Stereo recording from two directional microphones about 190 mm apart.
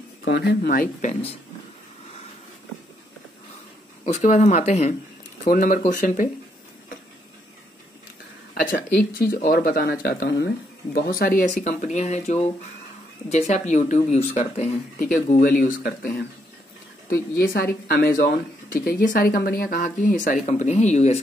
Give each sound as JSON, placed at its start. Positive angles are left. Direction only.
{"t": 0.2, "sound": "speech", "side_deg": 65}
{"t": 4.0, "sound": "speech", "side_deg": 40}
{"t": 8.6, "sound": "a sound", "side_deg": 45}
{"t": 9.3, "sound": "speech", "side_deg": 50}